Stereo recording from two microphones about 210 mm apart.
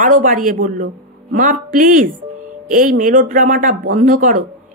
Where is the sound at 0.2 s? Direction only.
40° right (ahead or behind).